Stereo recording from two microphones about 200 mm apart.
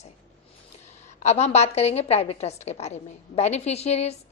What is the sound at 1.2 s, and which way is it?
A woman's voice, 35° left (ahead or behind).